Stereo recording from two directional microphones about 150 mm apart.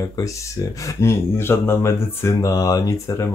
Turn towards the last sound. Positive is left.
turn(degrees=20)  # may be behind; listen again after turning